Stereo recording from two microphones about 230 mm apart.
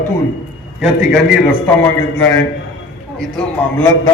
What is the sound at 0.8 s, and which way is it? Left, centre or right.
A man's voice, centre.